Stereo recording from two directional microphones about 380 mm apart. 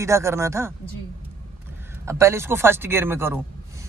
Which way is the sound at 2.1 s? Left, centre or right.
Centre.